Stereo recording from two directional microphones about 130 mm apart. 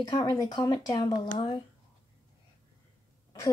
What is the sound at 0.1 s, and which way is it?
Speech, 30° left (ahead or behind).